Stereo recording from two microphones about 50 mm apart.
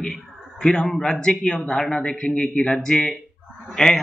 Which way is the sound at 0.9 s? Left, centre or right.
Centre.